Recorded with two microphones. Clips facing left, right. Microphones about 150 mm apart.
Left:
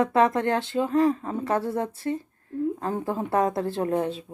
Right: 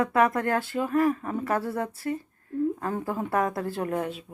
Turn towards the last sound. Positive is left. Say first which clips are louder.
# left 4 dB
turn(degrees=30)  # may be behind; listen again after turning